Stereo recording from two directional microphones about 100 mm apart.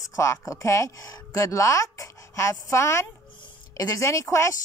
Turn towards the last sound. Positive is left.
turn(degrees=30)  # may be behind; listen again after turning